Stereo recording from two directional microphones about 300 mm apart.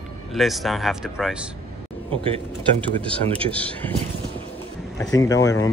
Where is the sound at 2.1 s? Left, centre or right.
Centre.